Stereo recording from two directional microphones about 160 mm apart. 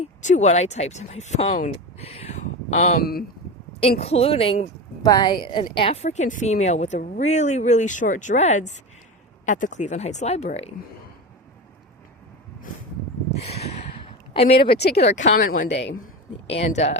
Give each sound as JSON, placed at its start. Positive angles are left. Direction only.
{"t": 0.0, "sound": "speech", "side_deg": 45}
{"t": 3.0, "sound": "speech", "side_deg": 70}
{"t": 4.0, "sound": "a woman's voice", "side_deg": 40}
{"t": 13.3, "sound": "a sound", "side_deg": 40}
{"t": 14.3, "sound": "speech", "side_deg": 40}
{"t": 14.7, "sound": "speech", "side_deg": 90}
{"t": 15.0, "sound": "a woman's voice", "side_deg": 50}
{"t": 15.7, "sound": "speech", "side_deg": 90}
{"t": 16.5, "sound": "a woman's voice", "side_deg": 45}